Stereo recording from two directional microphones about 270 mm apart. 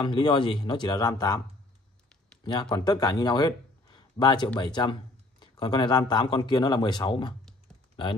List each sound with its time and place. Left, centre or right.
0.0 s speech: centre
2.7 s speech: centre
7.9 s typing: centre